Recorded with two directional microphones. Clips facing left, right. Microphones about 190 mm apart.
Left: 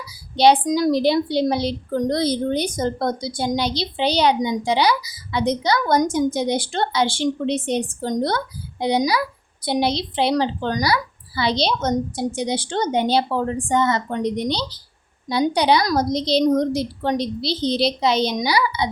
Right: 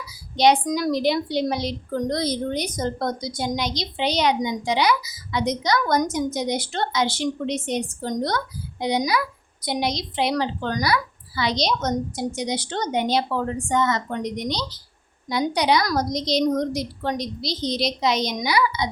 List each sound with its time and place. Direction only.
0.3 s a woman's voice: 30° left (ahead or behind)